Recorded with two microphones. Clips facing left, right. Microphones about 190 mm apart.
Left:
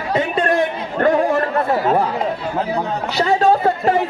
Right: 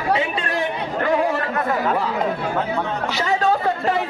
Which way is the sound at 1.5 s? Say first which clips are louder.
Left 4 dB; 30° left (ahead or behind).